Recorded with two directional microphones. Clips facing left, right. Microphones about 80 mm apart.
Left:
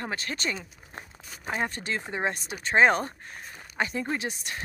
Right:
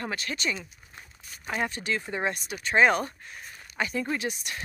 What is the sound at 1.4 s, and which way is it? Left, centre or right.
Speech, left.